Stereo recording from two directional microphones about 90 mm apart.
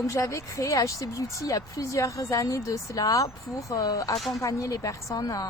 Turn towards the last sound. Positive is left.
turn(degrees=40)  # may be behind; listen again after turning